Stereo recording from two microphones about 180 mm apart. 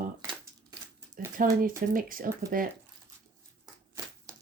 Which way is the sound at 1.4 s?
50° right (ahead or behind).